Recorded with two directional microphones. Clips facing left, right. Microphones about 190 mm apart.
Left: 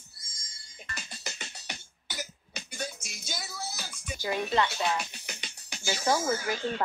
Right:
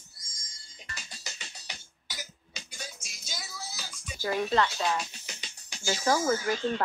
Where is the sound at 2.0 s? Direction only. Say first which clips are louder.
Left 5 dB; 60° left (ahead or behind).